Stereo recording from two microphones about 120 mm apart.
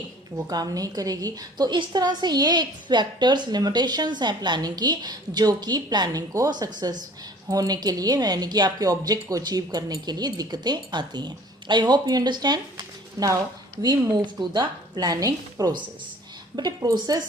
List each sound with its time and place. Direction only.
0.3 s a woman's voice: 30° right (ahead or behind)